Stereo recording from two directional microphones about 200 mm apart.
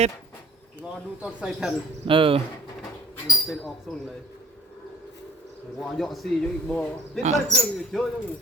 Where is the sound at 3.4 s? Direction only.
Centre (ahead or behind).